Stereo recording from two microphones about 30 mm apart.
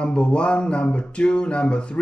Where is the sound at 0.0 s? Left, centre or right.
Left.